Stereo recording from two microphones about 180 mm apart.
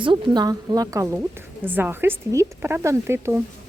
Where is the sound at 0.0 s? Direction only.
25° right (ahead or behind).